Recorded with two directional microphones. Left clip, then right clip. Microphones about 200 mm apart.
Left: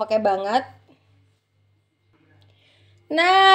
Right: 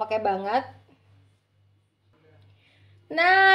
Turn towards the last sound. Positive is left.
turn(degrees=45)  # may be behind; listen again after turning